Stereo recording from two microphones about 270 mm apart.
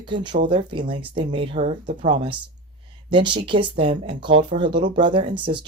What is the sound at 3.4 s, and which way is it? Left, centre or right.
Speech, centre.